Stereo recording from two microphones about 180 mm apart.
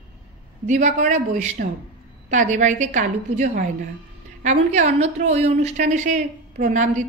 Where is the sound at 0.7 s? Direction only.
40° right (ahead or behind).